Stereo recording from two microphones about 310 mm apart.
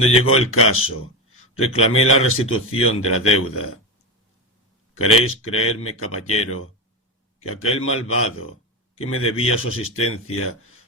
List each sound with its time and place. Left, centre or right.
0.0 s speech: left
4.9 s speech: left
7.3 s speech: left